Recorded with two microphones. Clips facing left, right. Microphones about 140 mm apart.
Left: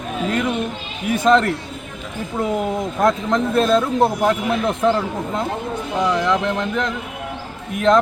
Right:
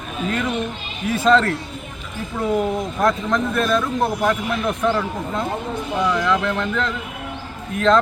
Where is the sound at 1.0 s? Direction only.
15° left (ahead or behind).